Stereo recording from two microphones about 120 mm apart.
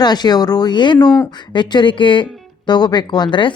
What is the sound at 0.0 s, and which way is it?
Speech, 35° left (ahead or behind).